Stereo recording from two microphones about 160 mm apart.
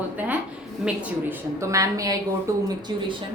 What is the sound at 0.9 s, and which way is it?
A woman's voice, 15° right (ahead or behind).